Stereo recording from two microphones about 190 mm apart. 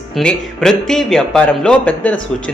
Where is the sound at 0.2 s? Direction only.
5° left (ahead or behind).